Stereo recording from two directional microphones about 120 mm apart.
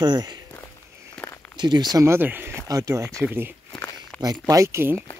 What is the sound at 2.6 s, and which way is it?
Speech, 30° right (ahead or behind).